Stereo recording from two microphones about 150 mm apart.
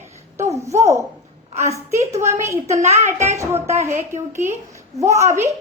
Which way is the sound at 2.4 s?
20° right (ahead or behind).